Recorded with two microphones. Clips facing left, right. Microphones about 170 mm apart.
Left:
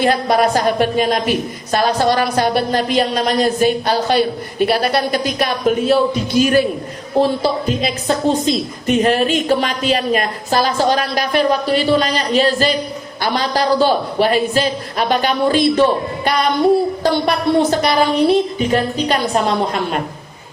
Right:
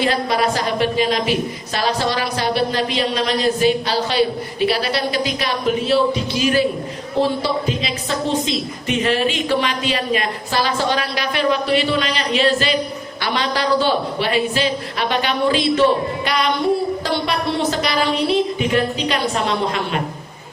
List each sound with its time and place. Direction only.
0.0 s a woman's voice: 50° left (ahead or behind)
7.8 s a woman's voice: 45° left (ahead or behind)
17.0 s a woman's voice: 45° left (ahead or behind)